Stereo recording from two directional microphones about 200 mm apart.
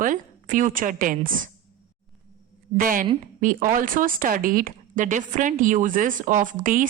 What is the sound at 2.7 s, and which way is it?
A woman's voice, 45° right (ahead or behind).